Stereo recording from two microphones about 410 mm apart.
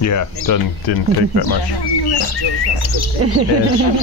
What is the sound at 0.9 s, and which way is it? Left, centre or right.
Speech, left.